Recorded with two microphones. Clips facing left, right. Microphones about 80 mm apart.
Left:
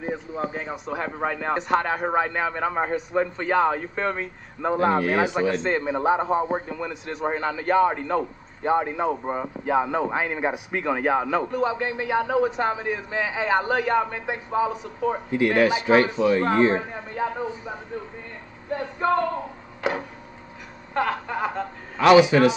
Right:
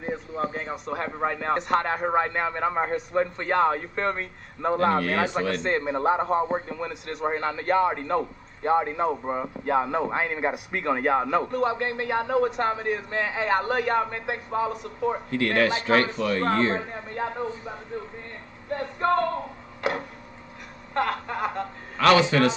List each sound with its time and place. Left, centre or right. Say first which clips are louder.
0.0 s a sound: left 1 dB; centre
0.8 s a man's voice: even; centre
5.6 s speech: left 1 dB; centre
6.7 s a man's voice: left 1 dB; centre
15.2 s speech: left 4 dB; centre
16.8 s a man's voice: left 3 dB; centre
18.7 s a man's voice: left 1 dB; centre
19.8 s a sound: left 1 dB; centre
20.9 s a man's voice: left 2 dB; centre
21.9 s speech: left 4 dB; centre